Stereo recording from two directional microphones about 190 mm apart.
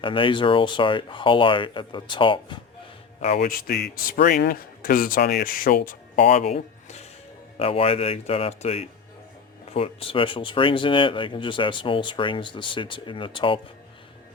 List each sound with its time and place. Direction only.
0.0 s speech: 25° left (ahead or behind)
3.3 s speech: 50° left (ahead or behind)
6.2 s speech: 35° left (ahead or behind)